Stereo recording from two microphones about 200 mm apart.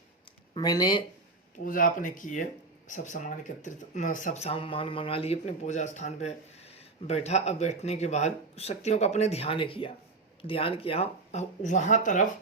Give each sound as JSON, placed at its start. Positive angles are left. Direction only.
{"t": 0.5, "sound": "speech", "side_deg": 20}
{"t": 1.6, "sound": "speech", "side_deg": 45}